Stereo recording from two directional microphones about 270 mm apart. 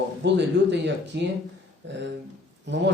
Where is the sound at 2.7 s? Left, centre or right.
Right.